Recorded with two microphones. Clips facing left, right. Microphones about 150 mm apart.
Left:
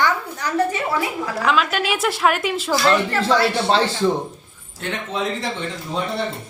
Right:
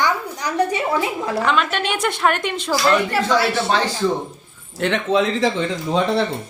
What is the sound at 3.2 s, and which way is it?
Speech, 30° left (ahead or behind).